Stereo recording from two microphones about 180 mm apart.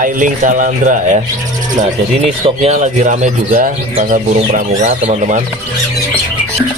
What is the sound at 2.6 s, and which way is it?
Speech, 40° right (ahead or behind).